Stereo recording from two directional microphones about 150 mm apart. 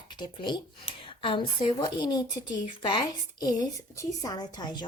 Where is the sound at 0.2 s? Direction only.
30° left (ahead or behind).